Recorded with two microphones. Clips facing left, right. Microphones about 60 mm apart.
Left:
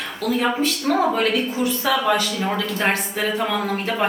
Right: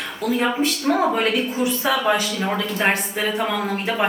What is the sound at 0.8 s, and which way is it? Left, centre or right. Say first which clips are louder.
A woman's voice: even; centre.